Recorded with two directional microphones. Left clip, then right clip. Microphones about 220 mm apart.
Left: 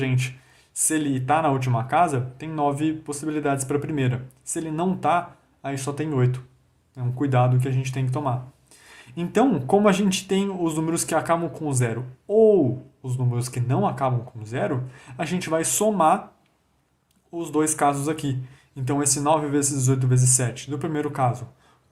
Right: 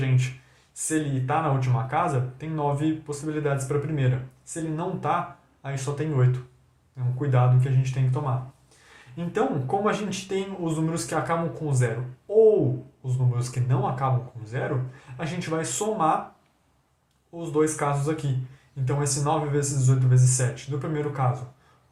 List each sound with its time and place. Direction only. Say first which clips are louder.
0.7 s speech: left 3 dB; 45° left (ahead or behind)
17.3 s speech: even; 45° left (ahead or behind)